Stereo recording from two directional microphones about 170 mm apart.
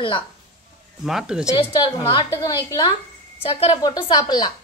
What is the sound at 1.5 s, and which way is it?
A woman's voice, 25° left (ahead or behind).